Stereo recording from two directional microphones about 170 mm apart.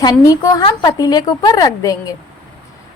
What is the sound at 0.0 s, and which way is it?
A woman's voice, 20° left (ahead or behind).